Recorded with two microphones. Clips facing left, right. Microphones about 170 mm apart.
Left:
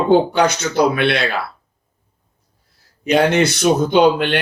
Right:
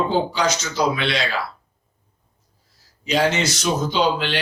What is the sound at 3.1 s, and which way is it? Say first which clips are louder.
Speech: left 6 dB; 60° left (ahead or behind).